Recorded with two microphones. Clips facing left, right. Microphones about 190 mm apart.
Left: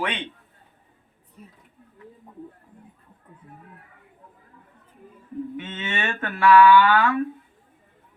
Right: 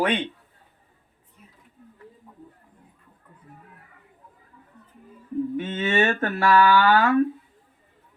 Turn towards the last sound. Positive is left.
turn(degrees=-40)  # may be behind; listen again after turning